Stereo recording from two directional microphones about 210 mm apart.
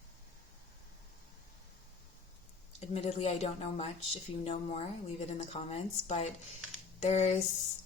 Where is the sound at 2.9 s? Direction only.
30° left (ahead or behind).